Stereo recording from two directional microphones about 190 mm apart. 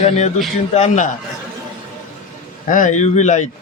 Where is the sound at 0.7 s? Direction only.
40° left (ahead or behind).